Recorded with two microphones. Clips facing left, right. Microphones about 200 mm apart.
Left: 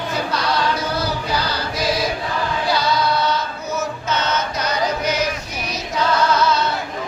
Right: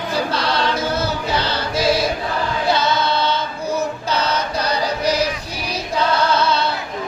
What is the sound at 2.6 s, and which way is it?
Choir, 25° right (ahead or behind).